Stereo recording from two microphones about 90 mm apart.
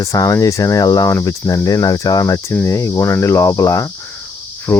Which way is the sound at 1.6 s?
45° left (ahead or behind).